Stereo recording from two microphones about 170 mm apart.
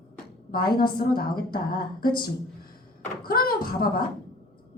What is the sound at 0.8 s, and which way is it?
A woman's voice, 60° left (ahead or behind).